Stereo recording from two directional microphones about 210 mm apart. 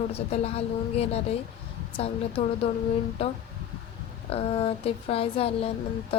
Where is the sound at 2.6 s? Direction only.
30° left (ahead or behind).